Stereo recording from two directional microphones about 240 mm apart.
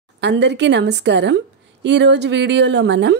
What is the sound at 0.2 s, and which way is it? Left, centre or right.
A woman's voice, right.